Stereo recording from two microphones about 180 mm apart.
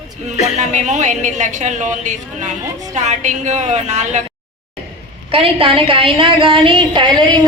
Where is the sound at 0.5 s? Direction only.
40° right (ahead or behind).